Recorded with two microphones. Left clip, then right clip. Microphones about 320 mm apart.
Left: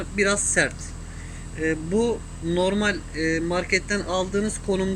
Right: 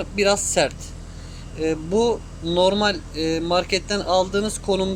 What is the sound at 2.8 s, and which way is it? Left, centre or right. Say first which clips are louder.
Speech: right 3 dB; right.